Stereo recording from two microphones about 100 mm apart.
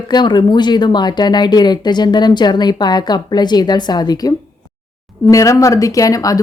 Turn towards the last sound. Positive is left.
turn(degrees=35)  # may be behind; listen again after turning